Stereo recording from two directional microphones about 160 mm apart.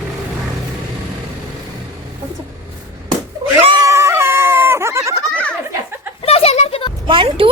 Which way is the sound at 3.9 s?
15° right (ahead or behind).